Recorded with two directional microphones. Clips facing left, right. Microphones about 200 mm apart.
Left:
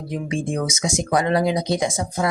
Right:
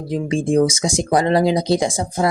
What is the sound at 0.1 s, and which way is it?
Speech, 30° right (ahead or behind).